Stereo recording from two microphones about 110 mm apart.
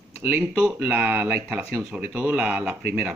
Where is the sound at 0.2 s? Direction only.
15° right (ahead or behind).